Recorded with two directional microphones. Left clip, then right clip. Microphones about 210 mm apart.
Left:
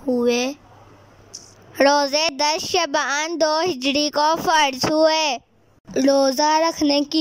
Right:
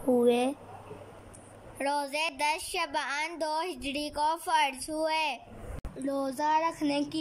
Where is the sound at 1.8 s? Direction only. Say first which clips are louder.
Left 14 dB; 45° left (ahead or behind).